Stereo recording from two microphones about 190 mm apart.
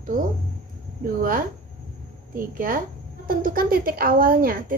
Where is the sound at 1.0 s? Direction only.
45° right (ahead or behind).